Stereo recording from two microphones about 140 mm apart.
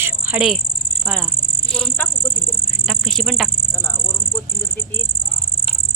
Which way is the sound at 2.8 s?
Centre (ahead or behind).